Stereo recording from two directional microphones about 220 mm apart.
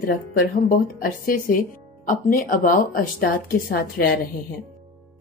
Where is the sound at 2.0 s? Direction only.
40° left (ahead or behind).